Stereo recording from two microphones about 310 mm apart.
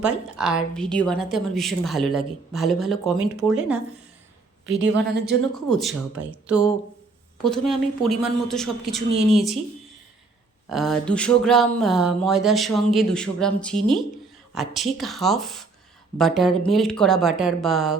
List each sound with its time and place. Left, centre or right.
0.0 s a woman's voice: centre
4.6 s a woman's voice: right
5.5 s a woman's voice: centre
10.7 s a woman's voice: centre